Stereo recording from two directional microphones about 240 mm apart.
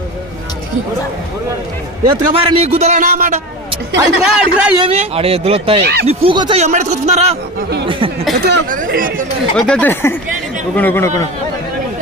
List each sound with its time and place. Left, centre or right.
2.4 s speech: right
3.9 s a man's voice: centre
4.8 s speech: right
5.8 s speech: right
6.1 s speech: right
8.4 s speech: right
9.6 s speech: centre